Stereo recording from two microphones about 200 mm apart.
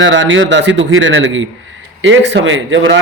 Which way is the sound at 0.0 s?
65° right (ahead or behind).